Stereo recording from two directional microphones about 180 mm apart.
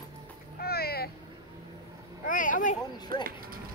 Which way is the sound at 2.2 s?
50° left (ahead or behind).